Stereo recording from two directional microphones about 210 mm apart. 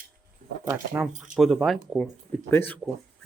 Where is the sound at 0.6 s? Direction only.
10° right (ahead or behind).